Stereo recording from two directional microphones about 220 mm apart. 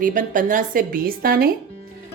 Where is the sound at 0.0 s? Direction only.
40° right (ahead or behind).